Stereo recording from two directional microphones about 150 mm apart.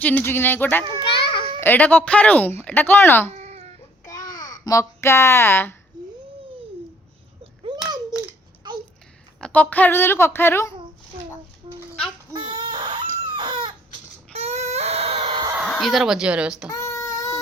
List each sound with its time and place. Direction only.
0.0 s speech: 10° left (ahead or behind)
1.1 s babbling: 35° left (ahead or behind)
1.6 s speech: 10° left (ahead or behind)
3.3 s cat: 45° right (ahead or behind)
4.0 s babbling: 20° left (ahead or behind)
4.3 s babbling: 65° left (ahead or behind)
4.5 s speech: 25° left (ahead or behind)
9.4 s speech: 10° left (ahead or behind)
11.6 s a sound: 30° right (ahead or behind)
12.4 s chicken: 30° right (ahead or behind)
14.3 s baby cry: 45° right (ahead or behind)
15.5 s speech: centre (ahead or behind)
16.7 s child singing: 20° left (ahead or behind)